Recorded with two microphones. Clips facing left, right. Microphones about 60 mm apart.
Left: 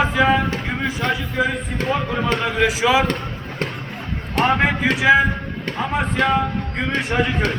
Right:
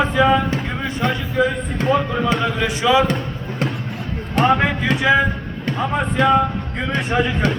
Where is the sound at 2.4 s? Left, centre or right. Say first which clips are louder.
Left 1 dB; centre.